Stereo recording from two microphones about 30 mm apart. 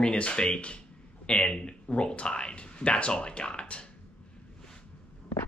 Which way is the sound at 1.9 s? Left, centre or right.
Left.